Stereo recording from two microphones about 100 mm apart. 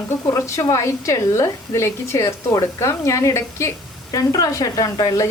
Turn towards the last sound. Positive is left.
turn(degrees=40)  # may be behind; listen again after turning